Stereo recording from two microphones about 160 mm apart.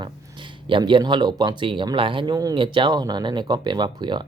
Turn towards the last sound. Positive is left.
turn(degrees=-30)  # may be behind; listen again after turning